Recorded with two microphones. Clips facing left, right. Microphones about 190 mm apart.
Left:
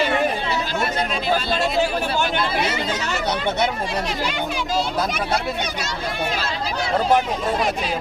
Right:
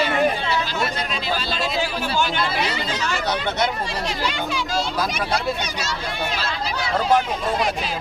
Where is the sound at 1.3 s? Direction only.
55° left (ahead or behind).